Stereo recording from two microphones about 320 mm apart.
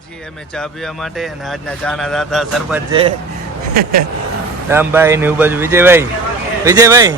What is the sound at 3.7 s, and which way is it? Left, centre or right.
Speech, right.